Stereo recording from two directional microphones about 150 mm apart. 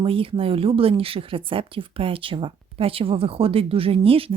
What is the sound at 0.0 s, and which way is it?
Speech, 35° right (ahead or behind).